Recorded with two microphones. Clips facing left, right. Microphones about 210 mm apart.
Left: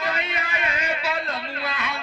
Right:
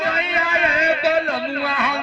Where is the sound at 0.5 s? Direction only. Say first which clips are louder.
Right 8 dB; 55° right (ahead or behind).